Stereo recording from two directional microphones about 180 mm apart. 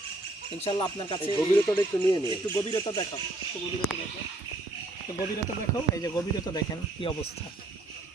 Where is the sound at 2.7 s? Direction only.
25° left (ahead or behind).